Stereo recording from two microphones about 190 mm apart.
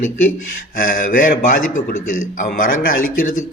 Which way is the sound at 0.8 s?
45° left (ahead or behind).